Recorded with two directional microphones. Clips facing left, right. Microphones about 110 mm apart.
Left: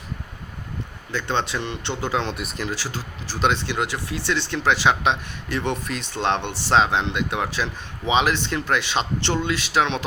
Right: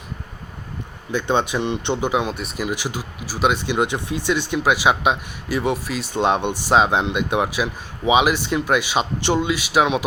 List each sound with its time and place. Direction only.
1.1 s speech: 15° right (ahead or behind)
2.3 s speech: centre (ahead or behind)
2.6 s speech: 15° right (ahead or behind)